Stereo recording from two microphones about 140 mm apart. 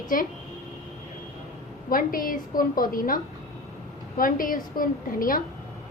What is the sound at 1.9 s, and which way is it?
A woman's voice, 90° left.